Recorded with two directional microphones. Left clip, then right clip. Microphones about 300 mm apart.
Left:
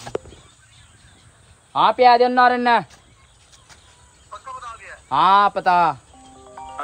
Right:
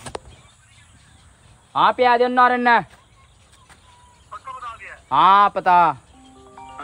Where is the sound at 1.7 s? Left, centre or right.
Centre.